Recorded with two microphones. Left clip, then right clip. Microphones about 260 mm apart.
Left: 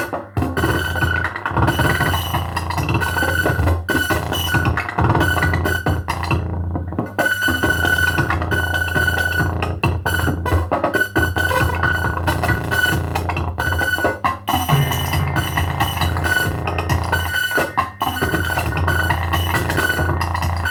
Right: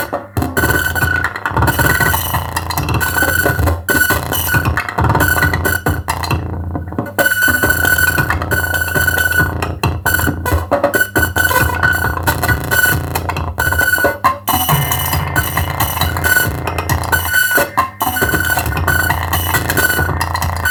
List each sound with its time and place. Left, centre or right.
0.3 s music: right
3.2 s music: right
15.5 s chink: right
17.1 s music: right